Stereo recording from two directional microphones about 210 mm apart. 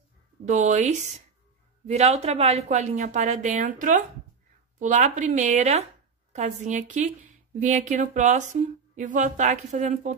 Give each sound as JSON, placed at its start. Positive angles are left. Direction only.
{"t": 0.5, "sound": "a woman's voice", "side_deg": -35}